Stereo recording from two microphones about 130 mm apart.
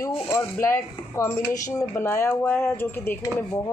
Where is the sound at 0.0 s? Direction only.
25° left (ahead or behind).